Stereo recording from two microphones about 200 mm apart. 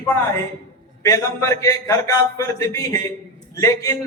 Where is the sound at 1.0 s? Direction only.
15° left (ahead or behind).